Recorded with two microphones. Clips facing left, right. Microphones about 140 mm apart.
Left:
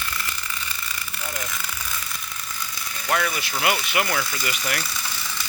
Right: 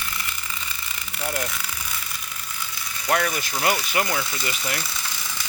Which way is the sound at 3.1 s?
40° right (ahead or behind).